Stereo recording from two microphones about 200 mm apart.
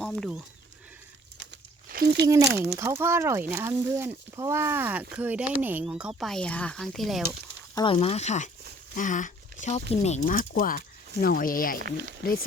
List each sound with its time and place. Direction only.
0.0 s speech: centre (ahead or behind)
1.5 s crumpling: 50° right (ahead or behind)
2.7 s speech: 10° right (ahead or behind)
7.8 s speech: 25° left (ahead or behind); by 11.8 s 45° left (ahead or behind)
11.8 s speech: 55° right (ahead or behind)
12.2 s speech: 45° left (ahead or behind)